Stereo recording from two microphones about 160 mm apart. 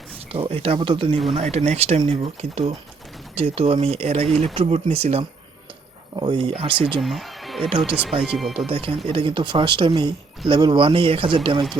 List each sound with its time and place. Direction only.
0.3 s speech: 35° right (ahead or behind)
6.1 s speech: 30° right (ahead or behind)
7.0 s a sound: centre (ahead or behind)
7.8 s speech: 5° right (ahead or behind)
8.7 s speech: 35° right (ahead or behind)